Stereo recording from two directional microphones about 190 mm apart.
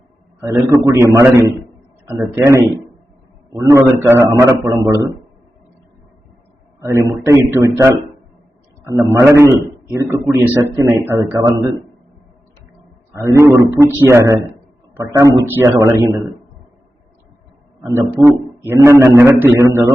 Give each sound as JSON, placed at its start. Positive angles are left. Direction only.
{"t": 0.4, "sound": "a man's voice", "side_deg": -20}
{"t": 6.7, "sound": "a man's voice", "side_deg": -15}
{"t": 13.1, "sound": "a man's voice", "side_deg": -15}
{"t": 17.8, "sound": "a man's voice", "side_deg": -15}